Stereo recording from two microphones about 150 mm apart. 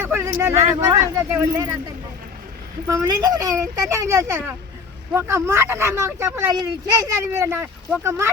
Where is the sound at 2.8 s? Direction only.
25° right (ahead or behind).